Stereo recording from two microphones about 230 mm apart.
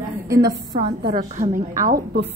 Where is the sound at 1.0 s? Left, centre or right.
Right.